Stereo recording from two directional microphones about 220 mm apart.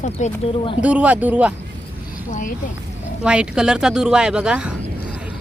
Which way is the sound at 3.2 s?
5° right (ahead or behind).